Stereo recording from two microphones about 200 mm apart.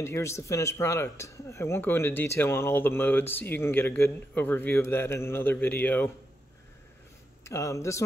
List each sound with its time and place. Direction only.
0.0 s speech: 15° left (ahead or behind)
7.4 s speech: 15° left (ahead or behind)